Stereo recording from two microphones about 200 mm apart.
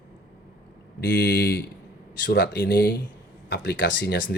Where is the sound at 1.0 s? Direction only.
60° left (ahead or behind).